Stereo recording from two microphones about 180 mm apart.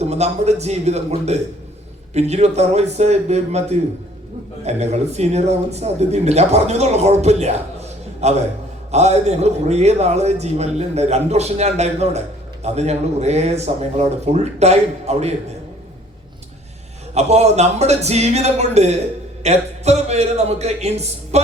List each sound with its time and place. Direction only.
0.0 s speech: 40° right (ahead or behind)
17.2 s speech: 35° right (ahead or behind)